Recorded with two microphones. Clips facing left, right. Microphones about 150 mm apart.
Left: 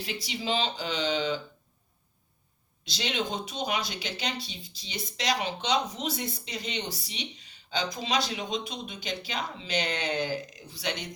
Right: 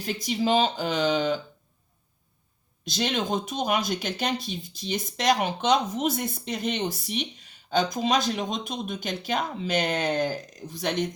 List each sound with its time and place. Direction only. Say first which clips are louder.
0.0 s speech: right 8 dB; 45° right (ahead or behind)
2.8 s speech: right 4 dB; 50° right (ahead or behind)